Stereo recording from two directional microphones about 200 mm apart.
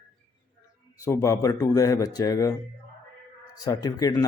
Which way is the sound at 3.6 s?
20° left (ahead or behind).